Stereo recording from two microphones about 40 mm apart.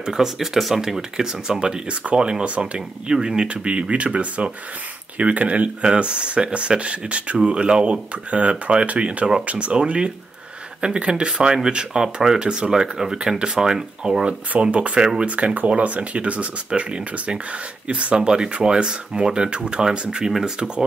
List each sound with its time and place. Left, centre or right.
0.0 s speech: centre
1.5 s speech: right
14.5 s speech: right; by 20.8 s centre